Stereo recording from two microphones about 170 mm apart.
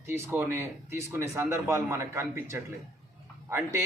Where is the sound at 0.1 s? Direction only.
15° right (ahead or behind).